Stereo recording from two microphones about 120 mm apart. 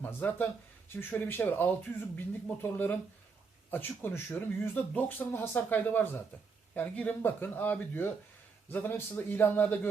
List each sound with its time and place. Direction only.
0.0 s speech: 15° left (ahead or behind)